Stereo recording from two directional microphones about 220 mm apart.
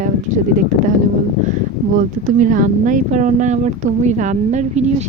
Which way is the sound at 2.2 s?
35° right (ahead or behind).